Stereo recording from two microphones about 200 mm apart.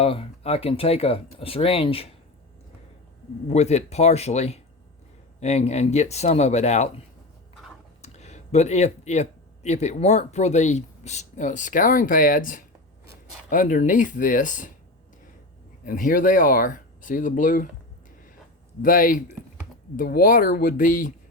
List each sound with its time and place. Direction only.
0.0 s speech: 30° left (ahead or behind)
3.5 s speech: 35° left (ahead or behind)
8.0 s speech: 35° left (ahead or behind)
15.8 s speech: 45° left (ahead or behind)
18.8 s speech: 45° left (ahead or behind)